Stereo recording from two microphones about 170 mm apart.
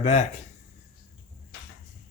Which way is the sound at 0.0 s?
40° left (ahead or behind).